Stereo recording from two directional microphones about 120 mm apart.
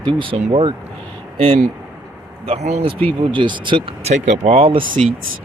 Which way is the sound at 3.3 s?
40° right (ahead or behind).